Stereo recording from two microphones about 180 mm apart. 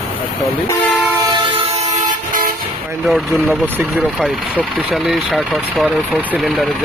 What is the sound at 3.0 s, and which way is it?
Speech, centre (ahead or behind).